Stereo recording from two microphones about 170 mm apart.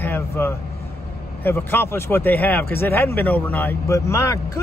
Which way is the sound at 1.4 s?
10° left (ahead or behind).